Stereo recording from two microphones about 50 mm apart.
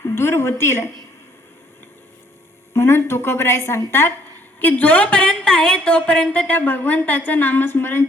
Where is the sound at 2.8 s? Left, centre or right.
Left.